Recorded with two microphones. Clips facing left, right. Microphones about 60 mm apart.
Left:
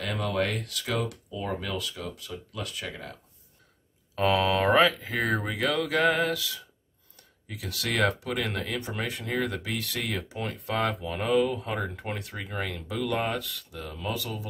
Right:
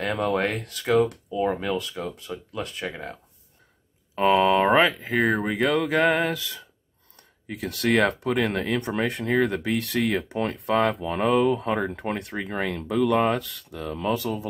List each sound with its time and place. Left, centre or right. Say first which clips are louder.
0.0 s speech: right 5 dB; right
12.1 s speech: right 6 dB; right